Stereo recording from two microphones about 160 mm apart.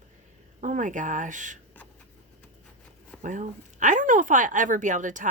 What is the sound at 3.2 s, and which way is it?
A woman's voice, 50° right (ahead or behind).